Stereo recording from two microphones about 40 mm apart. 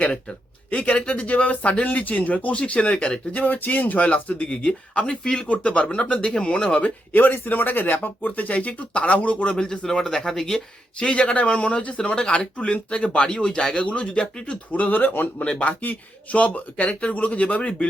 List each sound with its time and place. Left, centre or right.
0.0 s speech: left
3.3 s speech: left
4.0 s speech: left
5.2 s speech: centre
5.5 s speech: left
7.1 s speech: left
9.8 s speech: centre
10.9 s speech: left
14.7 s speech: left
15.4 s speech: left
15.8 s speech: left
16.4 s speech: left